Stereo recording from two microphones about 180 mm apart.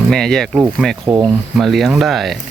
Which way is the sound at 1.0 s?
25° right (ahead or behind).